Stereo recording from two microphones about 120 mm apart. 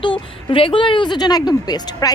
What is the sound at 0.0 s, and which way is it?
Speech, 45° left (ahead or behind).